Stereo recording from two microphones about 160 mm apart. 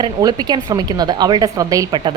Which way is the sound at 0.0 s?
25° right (ahead or behind).